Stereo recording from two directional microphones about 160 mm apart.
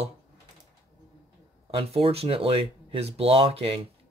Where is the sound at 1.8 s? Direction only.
35° right (ahead or behind).